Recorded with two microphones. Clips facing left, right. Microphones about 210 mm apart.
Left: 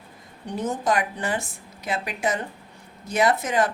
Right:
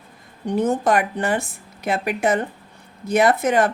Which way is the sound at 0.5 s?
60° right (ahead or behind).